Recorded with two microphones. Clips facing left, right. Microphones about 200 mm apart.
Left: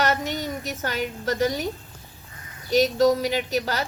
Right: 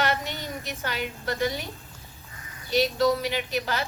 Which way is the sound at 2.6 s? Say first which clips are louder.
Left 4 dB; 45° left (ahead or behind).